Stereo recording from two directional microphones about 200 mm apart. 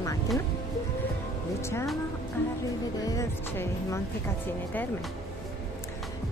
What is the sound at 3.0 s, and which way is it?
Speech, 15° left (ahead or behind).